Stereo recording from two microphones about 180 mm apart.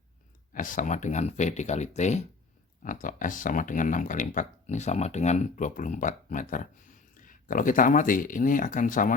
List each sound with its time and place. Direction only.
0.5 s speech: 45° left (ahead or behind)